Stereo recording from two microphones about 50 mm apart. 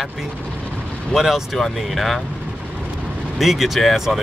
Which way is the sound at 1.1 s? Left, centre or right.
Centre.